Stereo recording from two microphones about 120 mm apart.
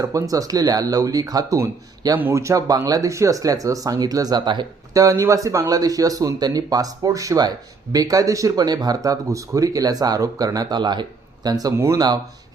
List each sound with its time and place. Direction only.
0.0 s speech: 25° right (ahead or behind)
4.9 s speech: 25° right (ahead or behind)